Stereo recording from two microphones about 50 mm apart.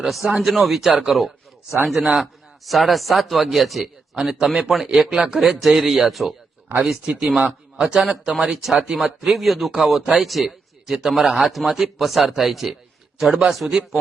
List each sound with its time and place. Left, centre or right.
0.1 s speech: centre
4.1 s a man's voice: centre
6.8 s a man's voice: centre